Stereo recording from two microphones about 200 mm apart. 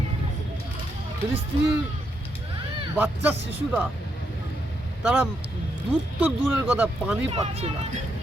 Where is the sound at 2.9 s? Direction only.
10° right (ahead or behind).